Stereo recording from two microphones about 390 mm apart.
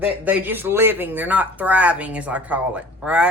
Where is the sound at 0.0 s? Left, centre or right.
Centre.